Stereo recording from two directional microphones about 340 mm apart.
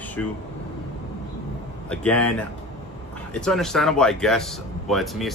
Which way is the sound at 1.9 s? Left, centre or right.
Centre.